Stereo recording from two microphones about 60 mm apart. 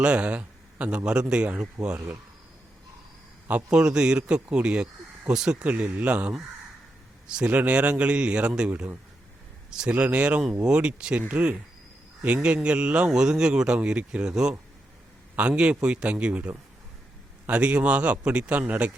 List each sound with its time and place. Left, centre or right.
0.0 s speech: centre
3.5 s speech: centre
5.6 s a man's voice: right
7.3 s a man's voice: centre